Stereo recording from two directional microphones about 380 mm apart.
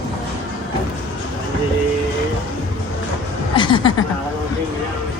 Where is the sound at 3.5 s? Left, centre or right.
Centre.